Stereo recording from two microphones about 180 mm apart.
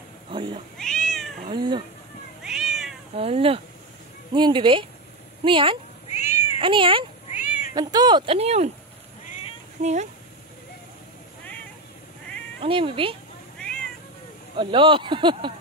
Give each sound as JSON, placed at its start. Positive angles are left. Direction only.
{"t": 0.3, "sound": "cat", "side_deg": -30}
{"t": 0.7, "sound": "cat", "side_deg": 5}
{"t": 1.5, "sound": "speech", "side_deg": -25}
{"t": 2.4, "sound": "cat", "side_deg": 0}
{"t": 3.2, "sound": "speech", "side_deg": -30}
{"t": 6.0, "sound": "cat", "side_deg": 40}
{"t": 6.6, "sound": "speech", "side_deg": -30}
{"t": 9.8, "sound": "speech", "side_deg": -40}
{"t": 12.5, "sound": "speech", "side_deg": -30}
{"t": 13.6, "sound": "cat", "side_deg": 5}
{"t": 14.6, "sound": "speech", "side_deg": -30}